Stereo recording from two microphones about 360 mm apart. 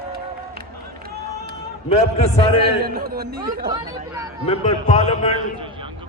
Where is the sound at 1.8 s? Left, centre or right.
Centre.